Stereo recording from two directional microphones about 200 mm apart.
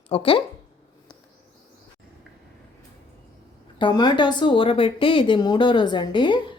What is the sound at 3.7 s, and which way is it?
Speech, 25° left (ahead or behind).